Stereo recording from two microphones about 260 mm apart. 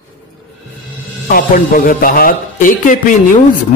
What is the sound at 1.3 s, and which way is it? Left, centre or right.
Speech, left.